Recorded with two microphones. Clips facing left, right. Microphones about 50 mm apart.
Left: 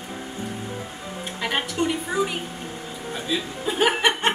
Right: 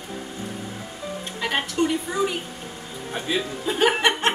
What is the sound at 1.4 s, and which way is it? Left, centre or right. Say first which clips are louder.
Speech: right 1 dB; centre.